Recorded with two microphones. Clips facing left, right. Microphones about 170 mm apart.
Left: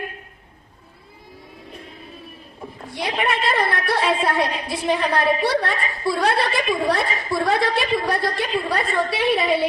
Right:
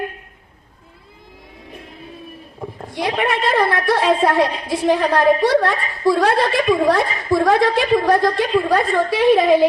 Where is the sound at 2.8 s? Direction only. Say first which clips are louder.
Right 4 dB; 50° right (ahead or behind).